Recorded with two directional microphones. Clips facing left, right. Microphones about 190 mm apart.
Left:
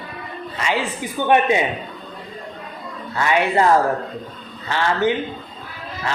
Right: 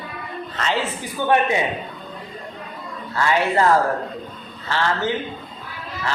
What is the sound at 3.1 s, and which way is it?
Speech, 20° left (ahead or behind).